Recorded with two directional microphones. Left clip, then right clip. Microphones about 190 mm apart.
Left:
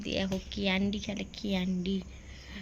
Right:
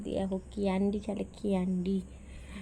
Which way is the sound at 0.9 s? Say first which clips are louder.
Right 1 dB; 20° right (ahead or behind).